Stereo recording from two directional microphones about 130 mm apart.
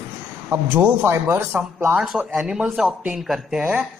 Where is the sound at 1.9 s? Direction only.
5° right (ahead or behind).